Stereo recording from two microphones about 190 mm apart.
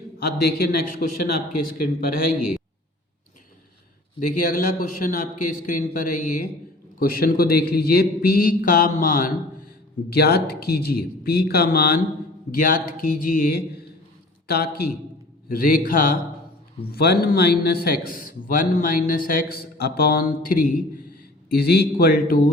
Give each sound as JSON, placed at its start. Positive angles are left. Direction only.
{"t": 0.2, "sound": "a man's voice", "side_deg": 55}
{"t": 4.4, "sound": "a man's voice", "side_deg": 45}
{"t": 10.1, "sound": "a man's voice", "side_deg": 55}